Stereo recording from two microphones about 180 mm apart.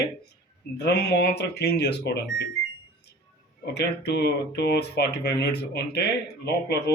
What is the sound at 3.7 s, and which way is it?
Speech, 70° left (ahead or behind).